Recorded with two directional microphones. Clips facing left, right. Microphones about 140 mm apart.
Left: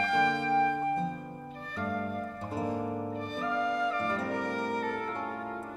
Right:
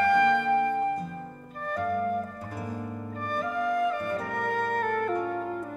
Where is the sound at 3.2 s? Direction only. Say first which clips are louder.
Right 5 dB; 45° right (ahead or behind).